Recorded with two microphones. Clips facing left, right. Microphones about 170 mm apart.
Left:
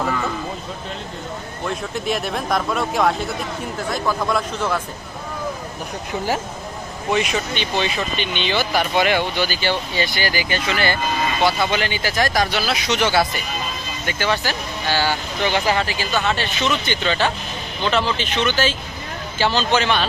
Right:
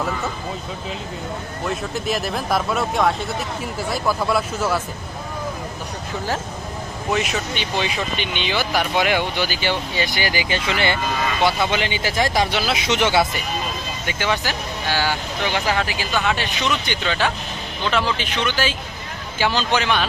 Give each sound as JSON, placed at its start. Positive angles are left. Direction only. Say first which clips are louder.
{"t": 1.6, "sound": "speech", "louder": "even", "side_deg": 0}
{"t": 7.1, "sound": "speech", "louder": "left 2 dB", "side_deg": 0}
{"t": 15.6, "sound": "speech", "louder": "left 2 dB", "side_deg": 5}
{"t": 16.3, "sound": "speech", "louder": "left 1 dB", "side_deg": -15}